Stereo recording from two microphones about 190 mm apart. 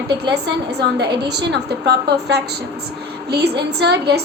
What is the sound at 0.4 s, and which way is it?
A woman's voice, 60° right (ahead or behind).